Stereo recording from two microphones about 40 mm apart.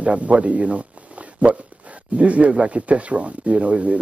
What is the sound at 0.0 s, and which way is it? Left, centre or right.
A man's voice, right.